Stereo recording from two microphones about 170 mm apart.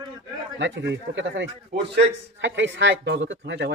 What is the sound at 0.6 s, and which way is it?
A man's voice, 90° right.